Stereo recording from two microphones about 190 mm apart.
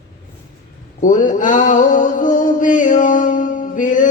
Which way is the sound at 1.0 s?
45° left (ahead or behind).